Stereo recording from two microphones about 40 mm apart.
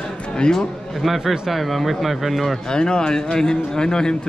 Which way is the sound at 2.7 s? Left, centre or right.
Centre.